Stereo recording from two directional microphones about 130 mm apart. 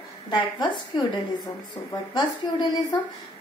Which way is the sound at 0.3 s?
35° left (ahead or behind).